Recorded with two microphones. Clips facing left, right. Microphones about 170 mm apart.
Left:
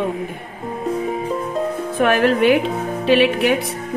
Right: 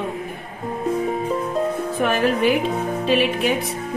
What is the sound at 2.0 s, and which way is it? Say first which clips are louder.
Speech: left 4 dB; 65° left (ahead or behind).